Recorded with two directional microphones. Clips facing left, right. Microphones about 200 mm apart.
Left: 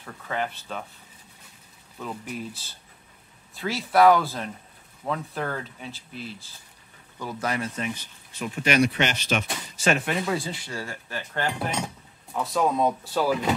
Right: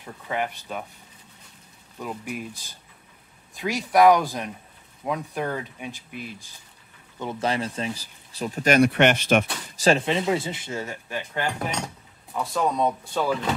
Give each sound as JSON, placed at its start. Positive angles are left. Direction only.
{"t": 0.0, "sound": "speech", "side_deg": -15}
{"t": 2.0, "sound": "speech", "side_deg": -10}
{"t": 7.2, "sound": "speech", "side_deg": -25}
{"t": 9.8, "sound": "speech", "side_deg": -30}
{"t": 12.3, "sound": "speech", "side_deg": 0}